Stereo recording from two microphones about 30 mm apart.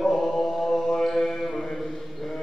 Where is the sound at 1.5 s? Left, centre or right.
Centre.